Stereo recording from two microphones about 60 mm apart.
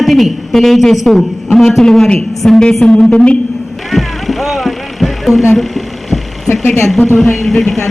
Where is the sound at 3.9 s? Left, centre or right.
Centre.